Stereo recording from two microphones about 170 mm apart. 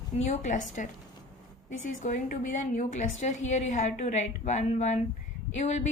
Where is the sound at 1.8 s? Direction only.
50° left (ahead or behind).